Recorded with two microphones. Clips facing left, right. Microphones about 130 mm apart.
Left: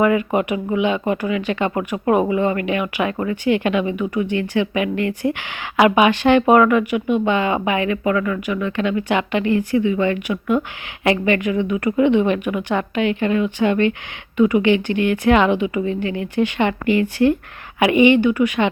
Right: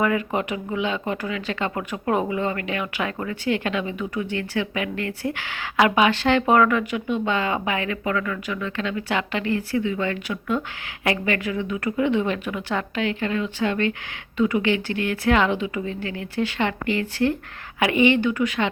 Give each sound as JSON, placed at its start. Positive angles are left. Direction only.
{"t": 0.3, "sound": "speech", "side_deg": 15}